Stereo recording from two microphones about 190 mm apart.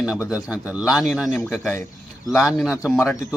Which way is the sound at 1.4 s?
10° left (ahead or behind).